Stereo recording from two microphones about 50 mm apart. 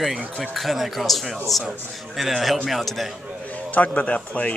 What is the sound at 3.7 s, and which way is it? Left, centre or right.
Speech, left.